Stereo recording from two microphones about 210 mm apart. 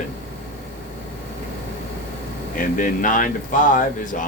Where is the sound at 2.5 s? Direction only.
40° left (ahead or behind).